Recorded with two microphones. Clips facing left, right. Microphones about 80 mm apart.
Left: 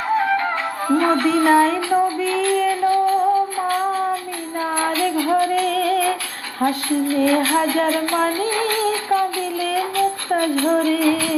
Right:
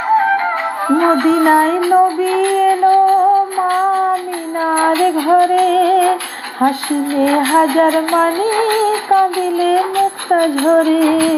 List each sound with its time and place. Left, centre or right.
0.9 s music: right
1.3 s a sound: right
2.0 s female singing: right
4.6 s music: right